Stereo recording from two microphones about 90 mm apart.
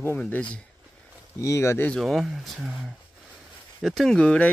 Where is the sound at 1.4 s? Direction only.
35° left (ahead or behind).